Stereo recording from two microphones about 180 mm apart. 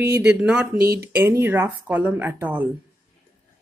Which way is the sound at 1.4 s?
10° right (ahead or behind).